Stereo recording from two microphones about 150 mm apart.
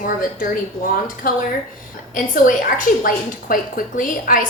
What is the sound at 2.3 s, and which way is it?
A woman's voice, 65° left (ahead or behind).